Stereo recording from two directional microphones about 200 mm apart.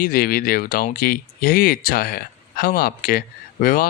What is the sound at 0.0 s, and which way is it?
Speech, 45° left (ahead or behind).